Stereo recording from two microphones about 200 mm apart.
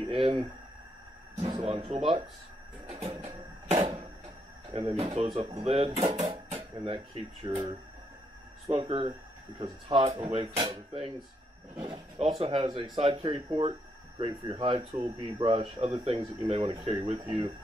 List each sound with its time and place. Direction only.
0.1 s speech: 25° right (ahead or behind)
2.9 s a sound: 30° right (ahead or behind)
4.7 s speech: 30° right (ahead or behind)
11.8 s speech: 30° right (ahead or behind)